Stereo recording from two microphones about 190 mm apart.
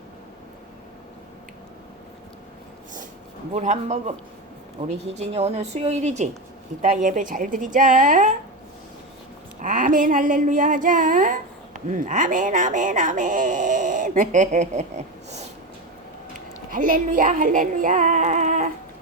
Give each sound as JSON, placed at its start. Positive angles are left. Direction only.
{"t": 3.5, "sound": "a woman's voice", "side_deg": -40}
{"t": 9.6, "sound": "a woman's voice", "side_deg": -45}
{"t": 16.6, "sound": "music", "side_deg": -45}